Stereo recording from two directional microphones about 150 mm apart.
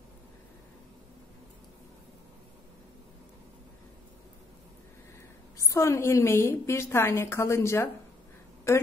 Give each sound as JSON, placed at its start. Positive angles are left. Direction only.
{"t": 5.7, "sound": "a woman's voice", "side_deg": 20}